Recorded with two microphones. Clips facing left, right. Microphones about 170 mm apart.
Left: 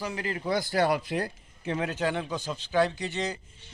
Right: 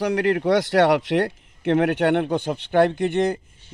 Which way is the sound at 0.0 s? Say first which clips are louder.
Right 12 dB; 70° right (ahead or behind).